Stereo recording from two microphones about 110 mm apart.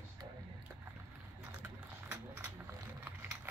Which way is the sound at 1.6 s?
20° right (ahead or behind).